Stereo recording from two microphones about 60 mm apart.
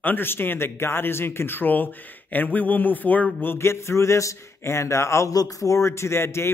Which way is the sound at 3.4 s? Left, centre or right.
Left.